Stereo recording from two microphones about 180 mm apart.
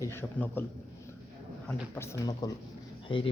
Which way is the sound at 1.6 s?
15° left (ahead or behind).